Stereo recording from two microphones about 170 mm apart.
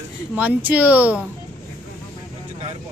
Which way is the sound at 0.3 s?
10° right (ahead or behind).